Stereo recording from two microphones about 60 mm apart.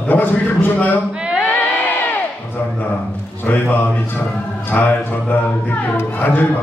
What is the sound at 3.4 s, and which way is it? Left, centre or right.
Speech, left.